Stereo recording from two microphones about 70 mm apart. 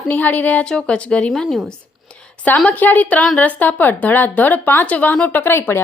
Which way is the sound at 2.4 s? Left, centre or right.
Left.